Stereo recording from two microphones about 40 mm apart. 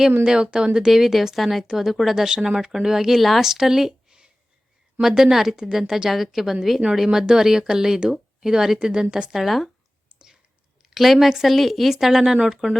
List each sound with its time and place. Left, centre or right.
0.3 s speech: right
3.2 s speech: centre
3.4 s a woman's voice: centre
9.3 s speech: centre
10.8 s a woman's voice: centre